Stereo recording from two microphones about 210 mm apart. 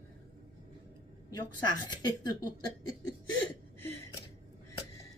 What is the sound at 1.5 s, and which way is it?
Speech, 20° left (ahead or behind).